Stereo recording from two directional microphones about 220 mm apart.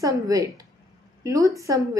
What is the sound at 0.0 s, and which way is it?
A woman's voice, 15° right (ahead or behind).